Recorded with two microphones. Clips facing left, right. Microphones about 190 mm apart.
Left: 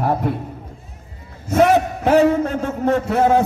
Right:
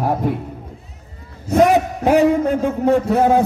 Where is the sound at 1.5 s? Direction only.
15° right (ahead or behind).